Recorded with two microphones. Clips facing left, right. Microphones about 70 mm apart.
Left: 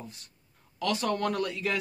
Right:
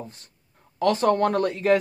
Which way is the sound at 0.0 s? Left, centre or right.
Right.